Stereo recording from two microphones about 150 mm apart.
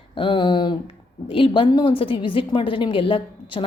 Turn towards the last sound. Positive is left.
turn(degrees=35)  # may be behind; listen again after turning